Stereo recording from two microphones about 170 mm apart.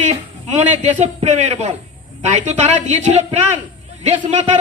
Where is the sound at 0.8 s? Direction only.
45° right (ahead or behind).